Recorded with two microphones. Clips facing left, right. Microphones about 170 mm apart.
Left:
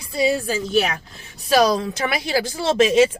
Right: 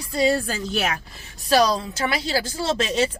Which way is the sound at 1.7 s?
15° left (ahead or behind).